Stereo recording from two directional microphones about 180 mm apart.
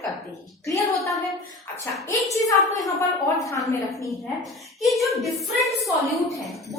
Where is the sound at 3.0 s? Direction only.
15° left (ahead or behind).